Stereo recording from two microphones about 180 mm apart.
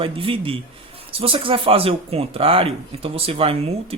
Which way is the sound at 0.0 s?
30° right (ahead or behind).